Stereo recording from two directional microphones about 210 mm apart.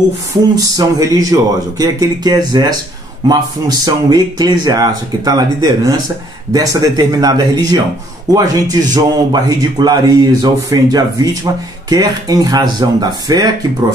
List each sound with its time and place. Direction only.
0.3 s speech: 15° right (ahead or behind)
8.9 s speech: 20° right (ahead or behind)